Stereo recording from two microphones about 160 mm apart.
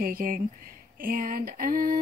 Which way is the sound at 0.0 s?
60° right (ahead or behind).